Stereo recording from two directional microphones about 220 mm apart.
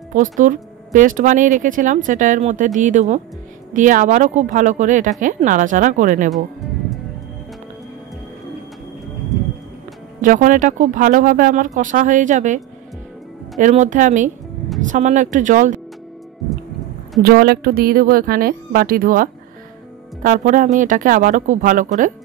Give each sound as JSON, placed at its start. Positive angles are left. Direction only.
{"t": 0.1, "sound": "speech", "side_deg": -35}
{"t": 10.2, "sound": "speech", "side_deg": -35}
{"t": 17.2, "sound": "speech", "side_deg": -45}